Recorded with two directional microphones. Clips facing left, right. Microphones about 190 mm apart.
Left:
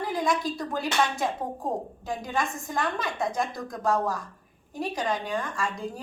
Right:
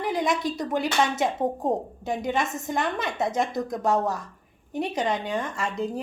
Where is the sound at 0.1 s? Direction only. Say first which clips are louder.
Right 2 dB; 20° right (ahead or behind).